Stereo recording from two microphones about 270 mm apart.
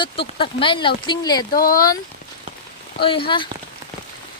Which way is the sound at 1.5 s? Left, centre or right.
Left.